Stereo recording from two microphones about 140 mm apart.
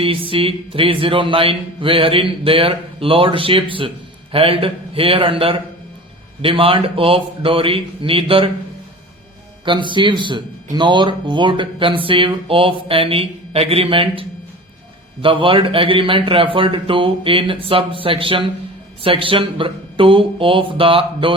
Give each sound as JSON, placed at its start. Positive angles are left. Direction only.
{"t": 0.0, "sound": "speech", "side_deg": -40}
{"t": 9.6, "sound": "speech", "side_deg": -35}